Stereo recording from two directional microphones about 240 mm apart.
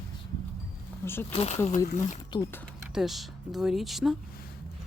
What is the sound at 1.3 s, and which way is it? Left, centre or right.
Speech, left.